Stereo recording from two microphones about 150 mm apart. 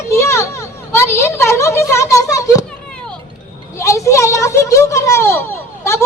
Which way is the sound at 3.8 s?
20° left (ahead or behind).